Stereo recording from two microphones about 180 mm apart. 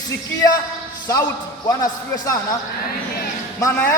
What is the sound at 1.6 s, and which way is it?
Speech, 20° left (ahead or behind).